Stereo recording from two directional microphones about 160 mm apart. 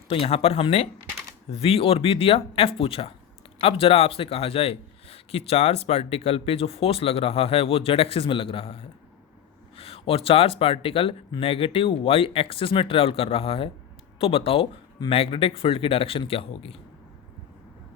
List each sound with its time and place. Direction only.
0.1 s speech: 35° left (ahead or behind)